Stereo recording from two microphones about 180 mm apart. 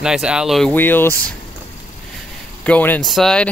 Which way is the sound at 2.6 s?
10° left (ahead or behind).